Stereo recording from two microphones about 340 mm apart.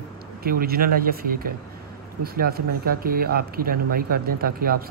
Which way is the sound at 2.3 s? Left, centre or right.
Right.